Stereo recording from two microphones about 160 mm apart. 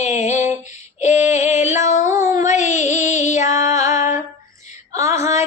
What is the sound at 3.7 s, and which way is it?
Music, 20° right (ahead or behind).